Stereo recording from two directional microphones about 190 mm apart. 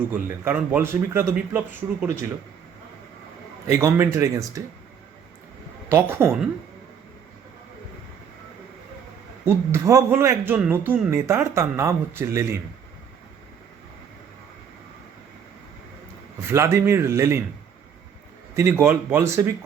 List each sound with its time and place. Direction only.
0.1 s a man's voice: 10° right (ahead or behind)
3.7 s a man's voice: 15° right (ahead or behind)
5.9 s a man's voice: 10° right (ahead or behind)
9.4 s a man's voice: 15° right (ahead or behind)
16.5 s a man's voice: 15° right (ahead or behind)
18.5 s a man's voice: 15° right (ahead or behind)